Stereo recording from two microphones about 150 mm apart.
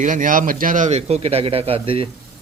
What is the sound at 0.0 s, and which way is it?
A man's voice, 60° right (ahead or behind).